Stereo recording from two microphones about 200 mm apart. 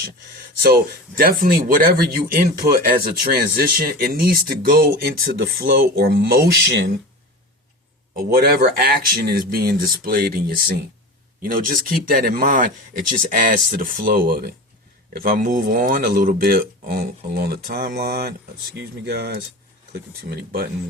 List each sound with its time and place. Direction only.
0.6 s speech: 45° right (ahead or behind)
8.3 s speech: 50° right (ahead or behind)